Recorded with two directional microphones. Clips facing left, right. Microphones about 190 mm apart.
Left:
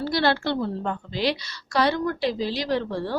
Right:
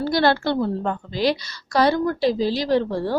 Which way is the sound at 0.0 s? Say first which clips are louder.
Right 4 dB; 45° right (ahead or behind).